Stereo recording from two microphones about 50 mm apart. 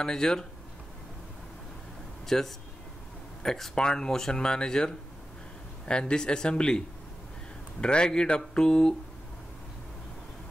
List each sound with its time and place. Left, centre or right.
0.0 s speech: centre
2.2 s speech: centre
7.8 s speech: centre